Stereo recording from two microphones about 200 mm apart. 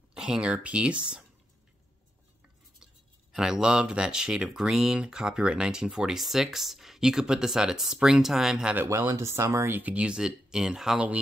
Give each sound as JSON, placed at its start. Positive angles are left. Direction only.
{"t": 0.1, "sound": "speech", "side_deg": -5}
{"t": 3.3, "sound": "speech", "side_deg": -5}
{"t": 8.8, "sound": "speech", "side_deg": -15}